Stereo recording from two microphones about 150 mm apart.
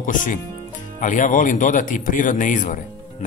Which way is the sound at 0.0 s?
60° left (ahead or behind).